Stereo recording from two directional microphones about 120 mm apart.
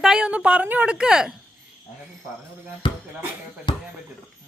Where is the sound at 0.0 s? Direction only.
5° right (ahead or behind).